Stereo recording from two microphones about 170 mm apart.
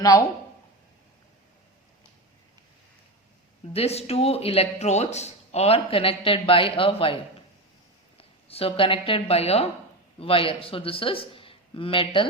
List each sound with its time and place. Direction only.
0.0 s speech: 20° left (ahead or behind)
3.7 s speech: 35° left (ahead or behind)